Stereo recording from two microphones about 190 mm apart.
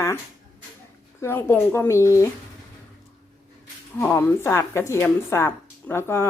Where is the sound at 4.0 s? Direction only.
15° left (ahead or behind).